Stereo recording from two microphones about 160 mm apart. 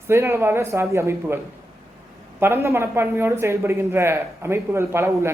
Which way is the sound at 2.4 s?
15° right (ahead or behind).